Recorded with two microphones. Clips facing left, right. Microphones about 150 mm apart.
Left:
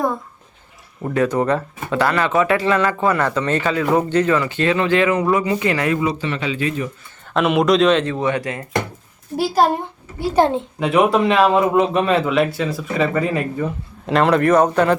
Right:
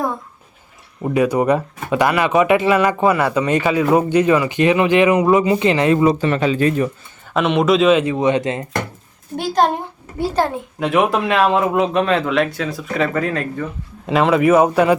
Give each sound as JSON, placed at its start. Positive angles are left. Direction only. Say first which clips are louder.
{"t": 1.0, "sound": "speech", "louder": "right 2 dB", "side_deg": -10}
{"t": 6.0, "sound": "speech", "louder": "right 6 dB", "side_deg": -45}
{"t": 7.3, "sound": "speech", "louder": "even", "side_deg": 0}
{"t": 9.3, "sound": "speech", "louder": "even", "side_deg": 5}
{"t": 10.3, "sound": "a child's voice", "louder": "left 5 dB", "side_deg": 25}
{"t": 10.8, "sound": "speech", "louder": "left 1 dB", "side_deg": 0}